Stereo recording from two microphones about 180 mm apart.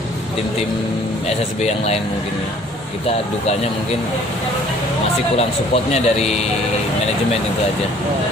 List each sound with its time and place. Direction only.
1.3 s speech: 35° left (ahead or behind)
5.4 s speech: 35° left (ahead or behind)